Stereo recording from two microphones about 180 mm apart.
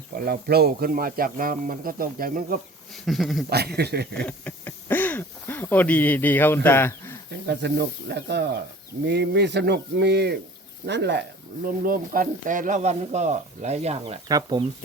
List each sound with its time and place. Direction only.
0.1 s speech: 60° right (ahead or behind)
3.1 s speech: centre (ahead or behind)
3.5 s speech: 65° right (ahead or behind)
4.2 s speech: 10° left (ahead or behind)
7.4 s speech: 70° right (ahead or behind)
11.8 s speech: 50° right (ahead or behind); by 14.2 s 35° right (ahead or behind)
14.3 s speech: 20° right (ahead or behind)